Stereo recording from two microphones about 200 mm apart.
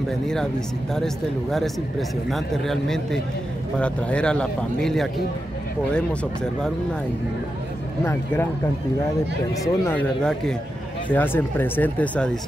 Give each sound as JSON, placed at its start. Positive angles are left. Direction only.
{"t": 0.9, "sound": "speech", "side_deg": 0}
{"t": 8.0, "sound": "speech", "side_deg": 10}
{"t": 9.5, "sound": "speech", "side_deg": 15}